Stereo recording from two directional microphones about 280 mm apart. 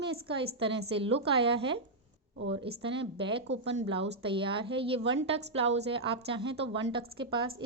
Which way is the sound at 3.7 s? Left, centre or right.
Centre.